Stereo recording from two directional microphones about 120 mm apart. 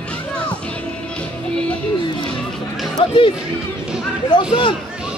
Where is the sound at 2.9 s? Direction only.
45° left (ahead or behind).